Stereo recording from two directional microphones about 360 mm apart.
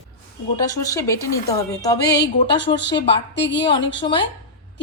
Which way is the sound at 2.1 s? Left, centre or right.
Left.